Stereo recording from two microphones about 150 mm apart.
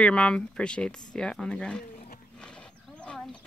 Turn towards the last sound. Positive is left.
turn(degrees=5)  # may be behind; listen again after turning